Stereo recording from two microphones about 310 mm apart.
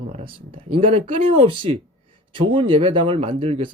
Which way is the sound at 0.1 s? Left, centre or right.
Centre.